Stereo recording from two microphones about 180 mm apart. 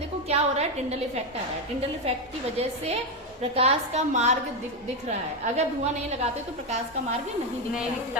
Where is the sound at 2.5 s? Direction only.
35° right (ahead or behind).